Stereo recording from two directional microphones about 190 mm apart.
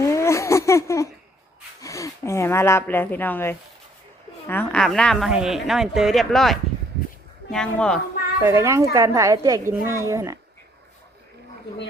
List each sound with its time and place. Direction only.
0.0 s a sound: 15° left (ahead or behind)
4.4 s a woman's voice: 10° left (ahead or behind)
8.4 s a woman's voice: 15° right (ahead or behind)